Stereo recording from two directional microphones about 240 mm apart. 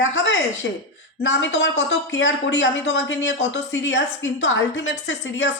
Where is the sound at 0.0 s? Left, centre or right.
Left.